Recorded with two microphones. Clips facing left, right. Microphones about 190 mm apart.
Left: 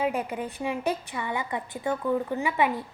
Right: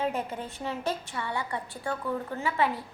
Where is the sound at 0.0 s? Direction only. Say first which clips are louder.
Left 3 dB; 10° left (ahead or behind).